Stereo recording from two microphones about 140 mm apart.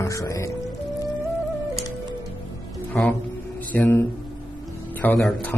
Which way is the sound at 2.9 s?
10° left (ahead or behind).